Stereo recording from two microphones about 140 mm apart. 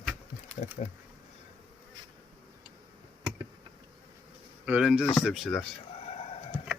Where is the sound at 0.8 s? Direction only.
55° left (ahead or behind).